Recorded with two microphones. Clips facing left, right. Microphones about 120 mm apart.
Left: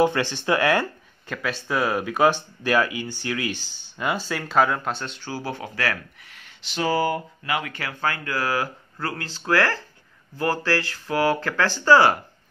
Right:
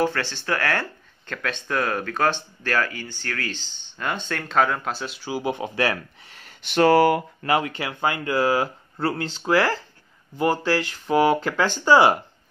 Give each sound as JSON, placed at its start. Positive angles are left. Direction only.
{"t": 0.0, "sound": "speech", "side_deg": 15}
{"t": 6.6, "sound": "speech", "side_deg": -60}
{"t": 7.4, "sound": "speech", "side_deg": -35}
{"t": 7.7, "sound": "speech", "side_deg": -20}